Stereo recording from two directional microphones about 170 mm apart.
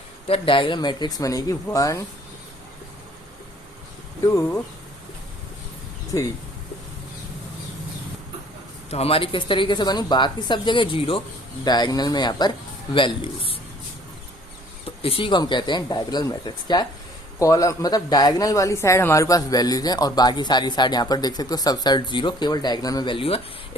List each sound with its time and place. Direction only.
0.3 s a man's voice: 30° left (ahead or behind)
6.1 s a man's voice: 20° left (ahead or behind)
8.9 s a man's voice: 35° left (ahead or behind)
14.8 s a man's voice: 35° left (ahead or behind)